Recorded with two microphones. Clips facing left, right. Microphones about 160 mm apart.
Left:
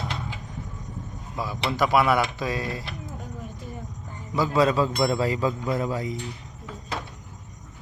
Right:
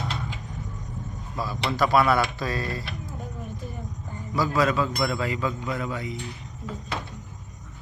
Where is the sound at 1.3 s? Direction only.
15° left (ahead or behind).